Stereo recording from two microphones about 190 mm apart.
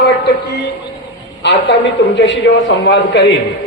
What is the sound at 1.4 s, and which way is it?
A woman's voice, 65° left (ahead or behind).